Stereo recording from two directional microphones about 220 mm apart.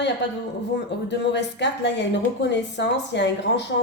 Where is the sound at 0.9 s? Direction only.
50° left (ahead or behind).